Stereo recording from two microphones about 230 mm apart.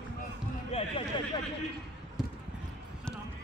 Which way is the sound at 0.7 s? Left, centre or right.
Left.